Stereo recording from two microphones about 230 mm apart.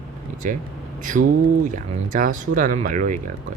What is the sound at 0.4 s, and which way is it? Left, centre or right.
Speech, right.